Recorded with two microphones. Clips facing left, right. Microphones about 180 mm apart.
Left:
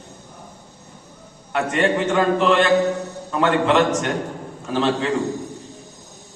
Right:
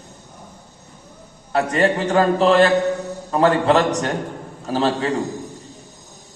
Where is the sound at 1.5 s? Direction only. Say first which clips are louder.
Right 1 dB; 35° right (ahead or behind).